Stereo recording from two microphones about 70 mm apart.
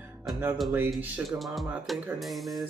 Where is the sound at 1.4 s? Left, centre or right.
Centre.